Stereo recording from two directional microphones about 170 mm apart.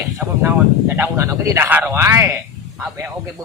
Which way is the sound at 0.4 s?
15° right (ahead or behind).